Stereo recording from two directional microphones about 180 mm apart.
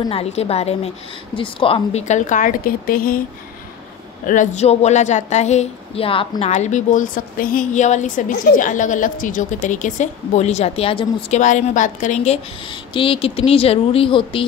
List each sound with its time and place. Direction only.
0.0 s a woman's voice: 35° left (ahead or behind); by 3.2 s 55° left (ahead or behind)
4.3 s a woman's voice: 40° left (ahead or behind)
12.6 s a woman's voice: 30° left (ahead or behind)